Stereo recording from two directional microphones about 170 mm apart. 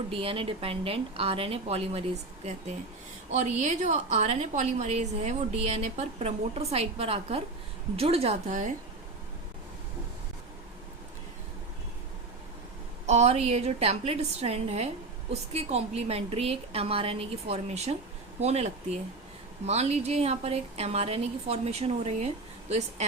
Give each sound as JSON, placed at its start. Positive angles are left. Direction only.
{"t": 0.1, "sound": "a woman's voice", "side_deg": -30}
{"t": 13.1, "sound": "a woman's voice", "side_deg": -40}